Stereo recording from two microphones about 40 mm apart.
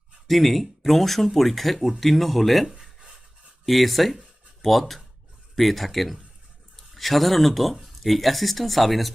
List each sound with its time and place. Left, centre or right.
0.3 s speech: centre
2.6 s a sound: centre
3.7 s speech: centre